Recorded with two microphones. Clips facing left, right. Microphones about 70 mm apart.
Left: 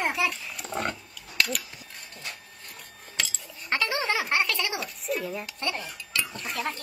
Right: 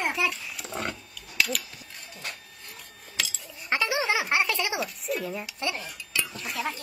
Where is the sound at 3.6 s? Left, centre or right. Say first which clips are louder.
Right 1 dB; centre.